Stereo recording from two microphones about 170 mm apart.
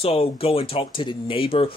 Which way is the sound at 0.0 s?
35° left (ahead or behind).